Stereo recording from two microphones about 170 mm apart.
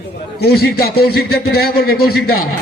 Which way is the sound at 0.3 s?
65° left (ahead or behind).